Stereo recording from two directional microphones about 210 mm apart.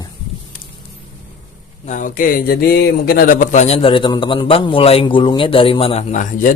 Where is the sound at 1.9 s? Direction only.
40° left (ahead or behind).